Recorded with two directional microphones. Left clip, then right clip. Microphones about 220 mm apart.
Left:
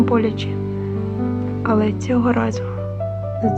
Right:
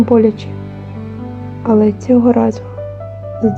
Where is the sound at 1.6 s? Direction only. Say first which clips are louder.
Right 7 dB; 20° right (ahead or behind).